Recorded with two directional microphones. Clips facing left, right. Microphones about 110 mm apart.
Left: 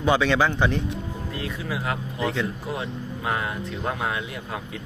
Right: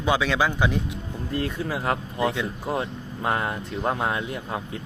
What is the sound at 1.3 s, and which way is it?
Speech, 40° right (ahead or behind).